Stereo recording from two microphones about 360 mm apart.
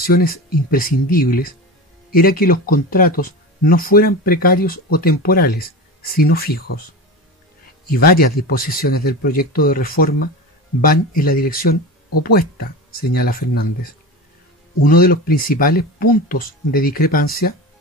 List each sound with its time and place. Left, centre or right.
0.0 s speech: left
7.9 s speech: left
14.8 s speech: left